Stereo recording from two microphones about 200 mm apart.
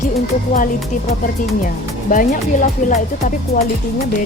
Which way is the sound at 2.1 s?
45° left (ahead or behind).